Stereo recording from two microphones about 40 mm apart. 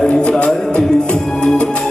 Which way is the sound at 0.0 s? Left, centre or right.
Left.